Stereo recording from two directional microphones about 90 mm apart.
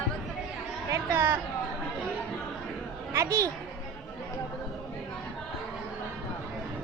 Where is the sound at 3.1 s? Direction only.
35° right (ahead or behind).